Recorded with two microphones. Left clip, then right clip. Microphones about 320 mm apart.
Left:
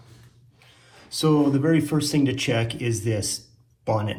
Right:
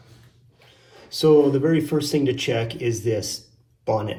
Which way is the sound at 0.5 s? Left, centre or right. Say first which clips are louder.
Right 2 dB; left.